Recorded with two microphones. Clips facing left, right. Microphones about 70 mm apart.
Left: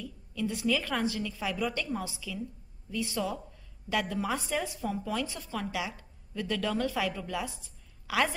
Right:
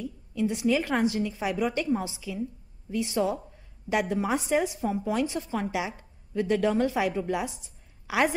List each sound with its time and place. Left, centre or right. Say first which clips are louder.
0.0 s a woman's voice: right 5 dB; right